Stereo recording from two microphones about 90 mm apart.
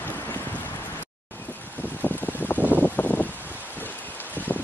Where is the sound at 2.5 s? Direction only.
20° right (ahead or behind).